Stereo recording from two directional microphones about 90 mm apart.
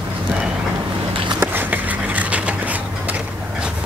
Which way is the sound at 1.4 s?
20° right (ahead or behind).